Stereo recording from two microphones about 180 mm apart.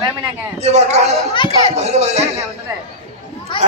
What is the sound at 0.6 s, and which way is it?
Speech, 40° right (ahead or behind).